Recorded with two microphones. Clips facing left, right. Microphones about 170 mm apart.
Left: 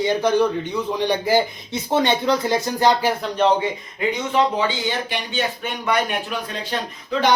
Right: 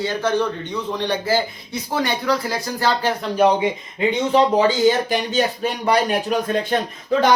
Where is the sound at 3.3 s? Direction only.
10° right (ahead or behind).